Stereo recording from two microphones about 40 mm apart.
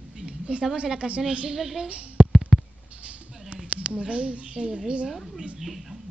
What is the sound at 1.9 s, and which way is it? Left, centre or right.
Speech, right.